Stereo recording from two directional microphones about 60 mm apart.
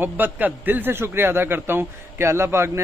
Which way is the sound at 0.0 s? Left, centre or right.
Right.